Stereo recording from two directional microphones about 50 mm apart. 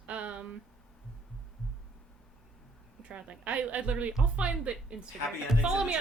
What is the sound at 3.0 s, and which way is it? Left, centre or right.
Speech, right.